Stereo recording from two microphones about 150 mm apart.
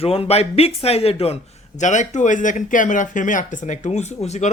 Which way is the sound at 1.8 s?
55° left (ahead or behind).